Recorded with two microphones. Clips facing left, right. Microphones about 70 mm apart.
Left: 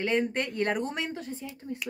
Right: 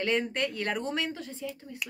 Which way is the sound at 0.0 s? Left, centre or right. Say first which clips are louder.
Left 1 dB; left.